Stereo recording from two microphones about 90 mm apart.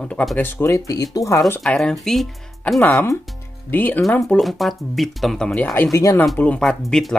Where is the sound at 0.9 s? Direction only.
45° left (ahead or behind).